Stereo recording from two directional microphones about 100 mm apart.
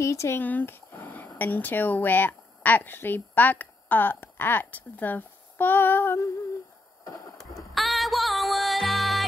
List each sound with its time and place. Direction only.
0.0 s speech: 30° left (ahead or behind)
7.1 s a sound: 35° left (ahead or behind)
7.7 s music: centre (ahead or behind)